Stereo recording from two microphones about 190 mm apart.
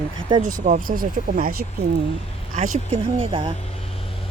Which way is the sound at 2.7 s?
30° right (ahead or behind).